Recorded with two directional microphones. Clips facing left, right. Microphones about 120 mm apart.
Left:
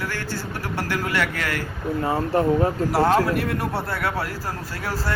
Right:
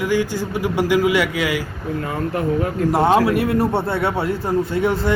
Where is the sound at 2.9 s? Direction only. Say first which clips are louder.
Right 4 dB; centre (ahead or behind).